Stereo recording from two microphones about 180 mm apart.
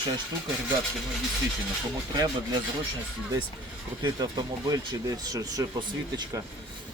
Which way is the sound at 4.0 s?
25° right (ahead or behind).